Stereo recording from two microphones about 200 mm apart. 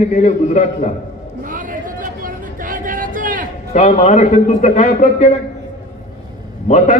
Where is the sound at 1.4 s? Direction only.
40° right (ahead or behind).